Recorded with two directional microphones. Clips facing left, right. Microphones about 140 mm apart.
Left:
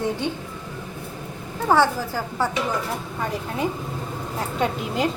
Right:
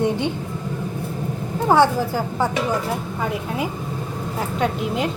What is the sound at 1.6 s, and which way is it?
Speech, 15° right (ahead or behind).